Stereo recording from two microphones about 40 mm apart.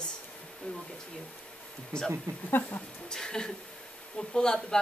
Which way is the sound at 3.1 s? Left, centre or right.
Centre.